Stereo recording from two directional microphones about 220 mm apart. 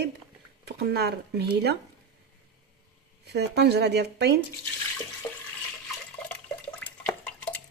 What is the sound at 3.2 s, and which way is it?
Speech, 50° right (ahead or behind).